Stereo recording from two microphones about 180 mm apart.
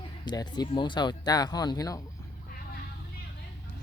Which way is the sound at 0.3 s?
25° left (ahead or behind).